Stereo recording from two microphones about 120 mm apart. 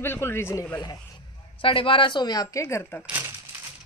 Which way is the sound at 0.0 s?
20° left (ahead or behind).